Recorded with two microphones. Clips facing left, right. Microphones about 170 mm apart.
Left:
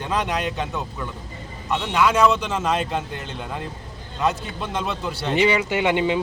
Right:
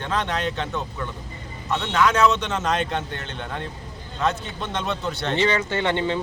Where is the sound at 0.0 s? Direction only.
10° left (ahead or behind).